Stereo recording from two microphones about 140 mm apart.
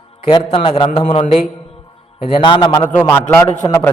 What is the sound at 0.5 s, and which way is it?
Speech, 45° left (ahead or behind).